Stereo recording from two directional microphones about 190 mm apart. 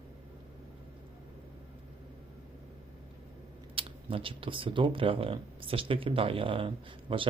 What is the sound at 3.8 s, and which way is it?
Speech, 30° right (ahead or behind).